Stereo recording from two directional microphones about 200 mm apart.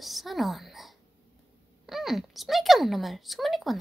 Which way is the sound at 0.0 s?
Centre (ahead or behind).